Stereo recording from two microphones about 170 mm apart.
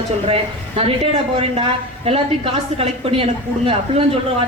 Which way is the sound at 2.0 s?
35° right (ahead or behind).